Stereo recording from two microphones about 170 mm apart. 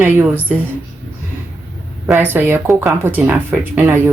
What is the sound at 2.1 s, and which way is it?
Speech, 10° right (ahead or behind).